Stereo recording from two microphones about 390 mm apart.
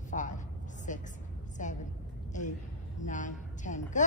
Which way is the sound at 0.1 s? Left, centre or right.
Centre.